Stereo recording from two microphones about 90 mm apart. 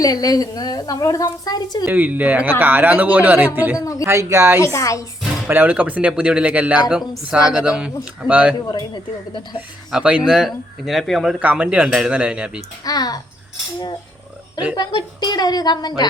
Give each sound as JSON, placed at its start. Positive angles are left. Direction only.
{"t": 0.0, "sound": "a woman's voice", "side_deg": 45}
{"t": 1.9, "sound": "speech", "side_deg": -20}
{"t": 3.8, "sound": "a woman's voice", "side_deg": 40}
{"t": 4.0, "sound": "speech", "side_deg": -30}
{"t": 4.6, "sound": "a woman's voice", "side_deg": 35}
{"t": 5.5, "sound": "speech", "side_deg": -20}
{"t": 8.6, "sound": "a woman's voice", "side_deg": 50}
{"t": 9.9, "sound": "speech", "side_deg": -15}
{"t": 11.3, "sound": "speech", "side_deg": -15}
{"t": 12.8, "sound": "a woman's voice", "side_deg": 45}
{"t": 14.8, "sound": "a woman's voice", "side_deg": 50}